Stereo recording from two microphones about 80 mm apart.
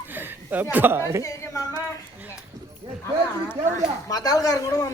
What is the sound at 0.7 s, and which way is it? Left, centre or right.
Speech, right.